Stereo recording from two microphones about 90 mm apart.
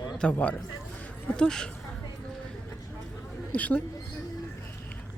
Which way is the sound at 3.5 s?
15° left (ahead or behind).